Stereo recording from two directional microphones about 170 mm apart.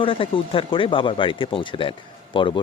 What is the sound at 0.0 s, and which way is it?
Speech, 30° left (ahead or behind).